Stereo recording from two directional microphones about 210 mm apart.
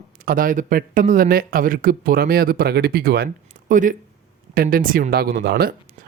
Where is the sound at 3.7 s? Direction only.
40° right (ahead or behind).